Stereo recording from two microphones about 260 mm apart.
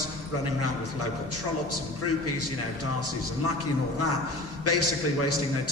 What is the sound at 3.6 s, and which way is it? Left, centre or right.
A man's voice, left.